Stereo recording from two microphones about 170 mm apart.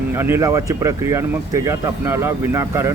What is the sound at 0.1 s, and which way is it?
Speech, 15° right (ahead or behind).